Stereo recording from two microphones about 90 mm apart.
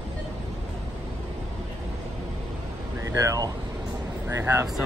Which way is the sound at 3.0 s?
40° right (ahead or behind).